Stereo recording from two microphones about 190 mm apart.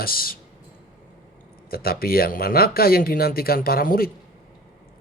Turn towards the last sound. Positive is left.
turn(degrees=50)  # may be behind; listen again after turning